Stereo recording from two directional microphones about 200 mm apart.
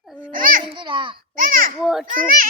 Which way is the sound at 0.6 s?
25° right (ahead or behind).